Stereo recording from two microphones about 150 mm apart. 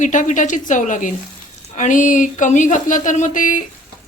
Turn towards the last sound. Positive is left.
turn(degrees=60)  # may be behind; listen again after turning